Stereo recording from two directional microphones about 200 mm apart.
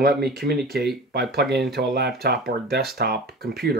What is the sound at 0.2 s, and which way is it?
Speech, 50° right (ahead or behind).